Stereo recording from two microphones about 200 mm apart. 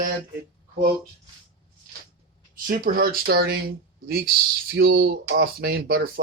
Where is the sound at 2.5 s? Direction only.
45° right (ahead or behind).